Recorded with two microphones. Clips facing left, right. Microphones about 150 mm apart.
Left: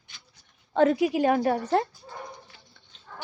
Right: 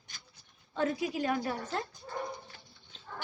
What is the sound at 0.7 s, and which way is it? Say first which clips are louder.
A woman's voice: left 10 dB; 80° left.